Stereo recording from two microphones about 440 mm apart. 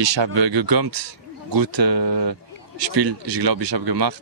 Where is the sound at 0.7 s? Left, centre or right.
Right.